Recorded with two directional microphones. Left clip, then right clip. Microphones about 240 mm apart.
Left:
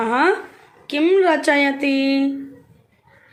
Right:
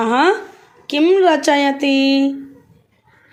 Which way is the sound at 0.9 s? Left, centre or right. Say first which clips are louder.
Right 3 dB; right.